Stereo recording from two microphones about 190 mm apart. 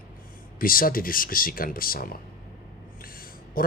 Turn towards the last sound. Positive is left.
turn(degrees=50)  # may be behind; listen again after turning